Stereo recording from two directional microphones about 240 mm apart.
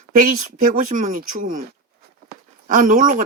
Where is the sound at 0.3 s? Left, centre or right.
Right.